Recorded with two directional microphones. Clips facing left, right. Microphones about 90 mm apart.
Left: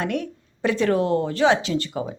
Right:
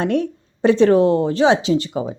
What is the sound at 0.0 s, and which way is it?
Speech, 30° right (ahead or behind).